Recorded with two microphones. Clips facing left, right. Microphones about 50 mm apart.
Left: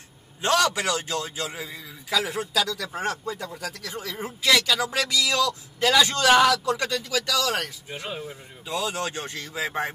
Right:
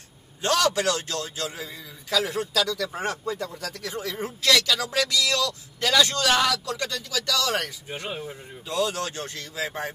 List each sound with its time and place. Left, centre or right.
0.4 s speech: centre
2.9 s speech: centre; by 7.2 s left
7.2 s speech: centre
8.6 s speech: centre